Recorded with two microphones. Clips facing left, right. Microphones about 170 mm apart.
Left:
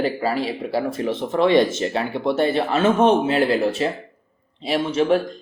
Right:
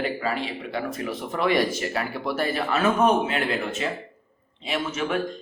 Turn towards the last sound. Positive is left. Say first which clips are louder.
# left 8 dB
turn(degrees=30)  # may be behind; listen again after turning